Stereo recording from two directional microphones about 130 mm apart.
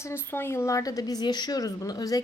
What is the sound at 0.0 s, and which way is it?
A woman's voice, 15° left (ahead or behind).